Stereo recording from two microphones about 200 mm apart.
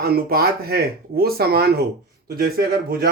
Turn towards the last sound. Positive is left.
turn(degrees=-50)  # may be behind; listen again after turning